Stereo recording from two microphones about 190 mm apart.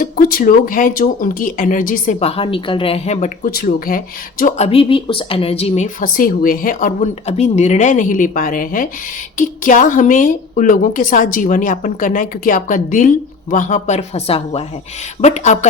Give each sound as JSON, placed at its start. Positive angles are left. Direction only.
{"t": 0.0, "sound": "a woman's voice", "side_deg": 50}